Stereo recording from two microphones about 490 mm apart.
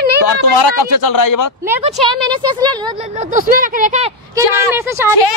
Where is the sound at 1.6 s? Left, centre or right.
Centre.